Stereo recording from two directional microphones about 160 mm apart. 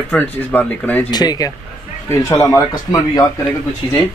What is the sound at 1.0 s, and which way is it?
Speech, 25° left (ahead or behind).